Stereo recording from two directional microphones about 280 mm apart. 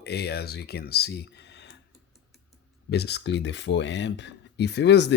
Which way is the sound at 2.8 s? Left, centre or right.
Left.